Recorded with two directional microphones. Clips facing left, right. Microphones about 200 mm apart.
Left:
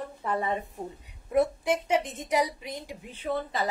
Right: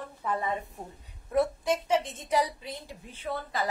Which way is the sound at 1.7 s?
10° left (ahead or behind).